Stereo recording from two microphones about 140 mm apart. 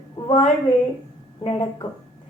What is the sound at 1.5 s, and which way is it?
Speech, 35° left (ahead or behind).